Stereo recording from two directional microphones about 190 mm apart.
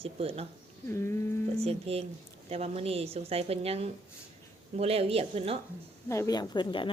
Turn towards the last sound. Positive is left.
turn(degrees=25)  # may be behind; listen again after turning